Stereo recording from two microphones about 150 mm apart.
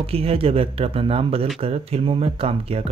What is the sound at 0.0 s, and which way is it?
Speech, 40° right (ahead or behind).